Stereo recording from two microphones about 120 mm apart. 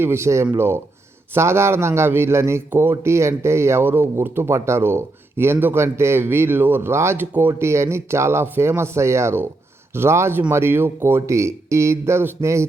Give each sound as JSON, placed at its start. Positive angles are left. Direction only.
{"t": 0.0, "sound": "a man's voice", "side_deg": -20}